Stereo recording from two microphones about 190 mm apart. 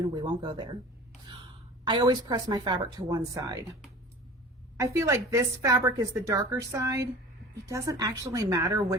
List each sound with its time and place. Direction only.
0.0 s a woman's voice: 20° right (ahead or behind)
1.8 s a woman's voice: 20° right (ahead or behind)
4.8 s a woman's voice: 15° right (ahead or behind)